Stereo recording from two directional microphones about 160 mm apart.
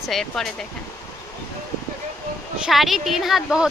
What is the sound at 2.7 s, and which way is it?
A woman's voice, centre (ahead or behind).